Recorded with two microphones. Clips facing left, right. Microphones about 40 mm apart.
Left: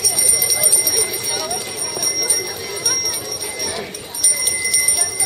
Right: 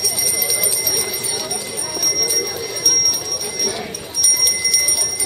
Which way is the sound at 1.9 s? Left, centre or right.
Centre.